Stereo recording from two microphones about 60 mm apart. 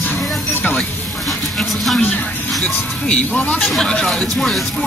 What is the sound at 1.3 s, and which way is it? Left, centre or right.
Speech, centre.